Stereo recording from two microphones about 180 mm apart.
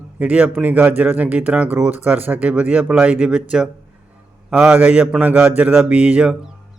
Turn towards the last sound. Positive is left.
turn(degrees=-5)  # may be behind; listen again after turning